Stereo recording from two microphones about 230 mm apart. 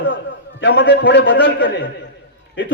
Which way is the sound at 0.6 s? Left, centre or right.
Left.